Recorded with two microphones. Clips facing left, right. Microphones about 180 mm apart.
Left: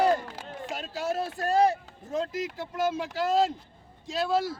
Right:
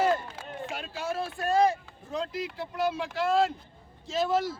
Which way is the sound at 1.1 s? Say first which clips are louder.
Even; 40° left (ahead or behind).